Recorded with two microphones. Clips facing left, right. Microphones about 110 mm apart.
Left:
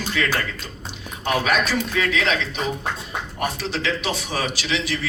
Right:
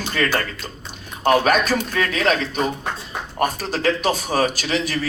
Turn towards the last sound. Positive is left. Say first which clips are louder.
# right 2 dB
turn(degrees=-45)  # may be behind; listen again after turning